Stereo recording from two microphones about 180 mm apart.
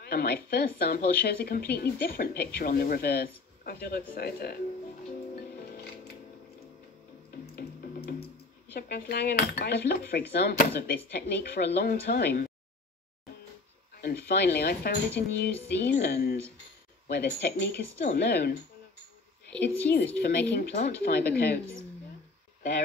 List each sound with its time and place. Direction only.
0.0 s speech: 55° left (ahead or behind)
7.5 s music: 60° left (ahead or behind)
8.7 s speech: 60° left (ahead or behind)
13.9 s speech: 60° left (ahead or behind)
20.2 s speech: 60° left (ahead or behind)